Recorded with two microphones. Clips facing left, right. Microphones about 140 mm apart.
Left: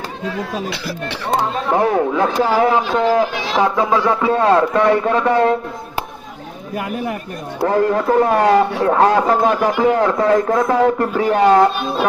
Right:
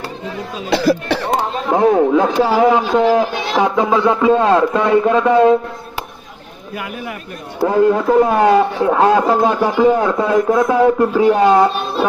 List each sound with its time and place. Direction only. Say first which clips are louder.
0.7 s speech: right 11 dB; 40° right (ahead or behind)
1.7 s a man's voice: right 5 dB; 20° right (ahead or behind)
7.7 s a man's voice: right 3 dB; 15° right (ahead or behind)